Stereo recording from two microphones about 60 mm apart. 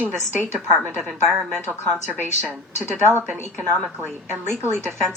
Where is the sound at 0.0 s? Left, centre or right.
Right.